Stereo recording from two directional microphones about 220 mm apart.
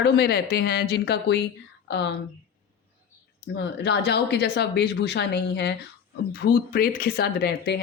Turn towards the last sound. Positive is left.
turn(degrees=50)  # may be behind; listen again after turning